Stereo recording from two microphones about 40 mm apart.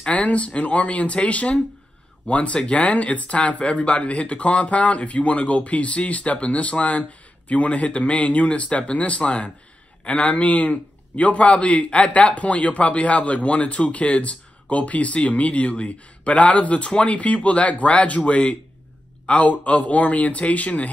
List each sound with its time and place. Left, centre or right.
0.0 s a man's voice: left